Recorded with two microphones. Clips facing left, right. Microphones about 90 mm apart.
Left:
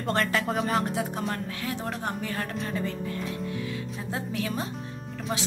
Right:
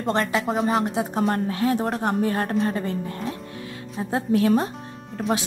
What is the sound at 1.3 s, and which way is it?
Speech, 45° right (ahead or behind).